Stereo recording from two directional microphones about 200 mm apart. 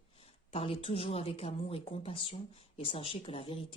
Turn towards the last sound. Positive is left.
turn(degrees=25)  # may be behind; listen again after turning